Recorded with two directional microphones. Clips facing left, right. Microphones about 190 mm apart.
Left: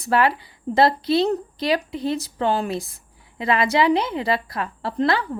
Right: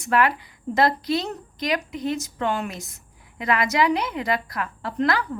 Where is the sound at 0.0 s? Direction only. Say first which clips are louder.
Left 2 dB; 30° left (ahead or behind).